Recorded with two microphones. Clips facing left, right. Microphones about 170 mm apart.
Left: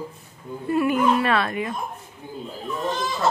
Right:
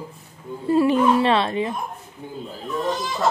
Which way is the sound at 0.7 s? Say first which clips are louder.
Right 3 dB; 25° right (ahead or behind).